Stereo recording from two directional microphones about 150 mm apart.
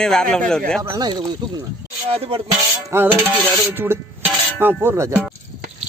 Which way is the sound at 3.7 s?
15° right (ahead or behind).